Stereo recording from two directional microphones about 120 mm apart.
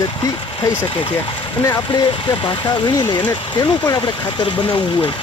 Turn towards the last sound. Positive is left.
turn(degrees=40)  # may be behind; listen again after turning